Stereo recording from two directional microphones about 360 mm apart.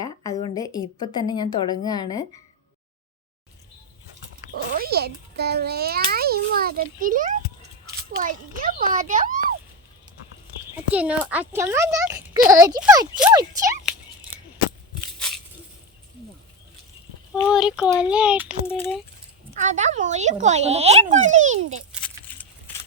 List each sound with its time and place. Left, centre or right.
0.0 s a woman's voice: centre
4.8 s a child's voice: right
10.9 s a child's voice: centre
17.4 s a child's voice: centre
19.6 s a child's voice: centre
22.0 s a sound: centre